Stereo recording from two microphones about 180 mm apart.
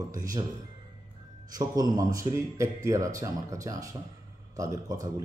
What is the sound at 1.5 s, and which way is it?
A man's voice, 20° right (ahead or behind).